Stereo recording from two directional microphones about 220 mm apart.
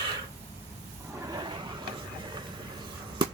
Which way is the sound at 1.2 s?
20° right (ahead or behind).